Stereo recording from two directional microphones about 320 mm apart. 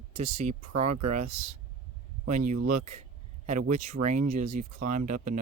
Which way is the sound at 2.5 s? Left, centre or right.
Right.